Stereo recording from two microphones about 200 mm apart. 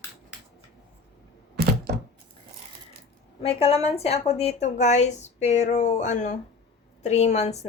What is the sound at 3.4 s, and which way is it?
A woman's voice, 30° left (ahead or behind).